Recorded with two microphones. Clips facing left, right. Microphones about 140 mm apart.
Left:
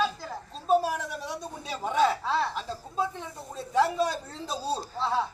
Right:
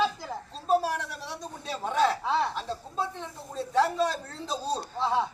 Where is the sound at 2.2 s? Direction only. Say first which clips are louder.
Right 1 dB; 15° right (ahead or behind).